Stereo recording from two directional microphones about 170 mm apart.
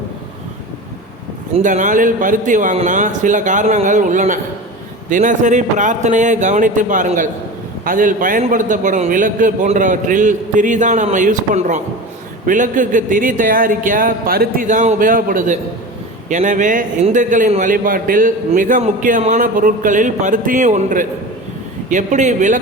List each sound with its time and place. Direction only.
1.6 s a man's voice: 50° right (ahead or behind)